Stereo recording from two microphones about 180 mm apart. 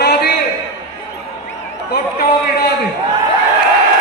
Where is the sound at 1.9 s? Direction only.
60° left (ahead or behind).